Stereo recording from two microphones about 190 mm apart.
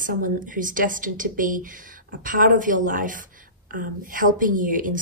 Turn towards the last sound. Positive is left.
turn(degrees=-45)  # may be behind; listen again after turning